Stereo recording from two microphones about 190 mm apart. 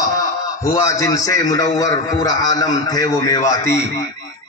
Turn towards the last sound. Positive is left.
turn(degrees=15)  # may be behind; listen again after turning